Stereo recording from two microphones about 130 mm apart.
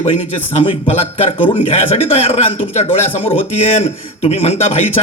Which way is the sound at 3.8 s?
55° left (ahead or behind).